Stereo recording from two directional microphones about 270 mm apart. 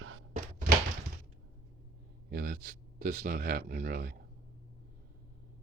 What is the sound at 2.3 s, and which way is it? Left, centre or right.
Speech, right.